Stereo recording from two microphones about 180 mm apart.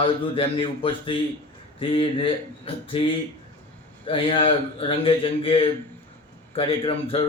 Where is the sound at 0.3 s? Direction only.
30° left (ahead or behind).